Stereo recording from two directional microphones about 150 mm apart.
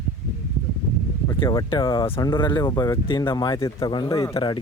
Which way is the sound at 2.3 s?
30° left (ahead or behind).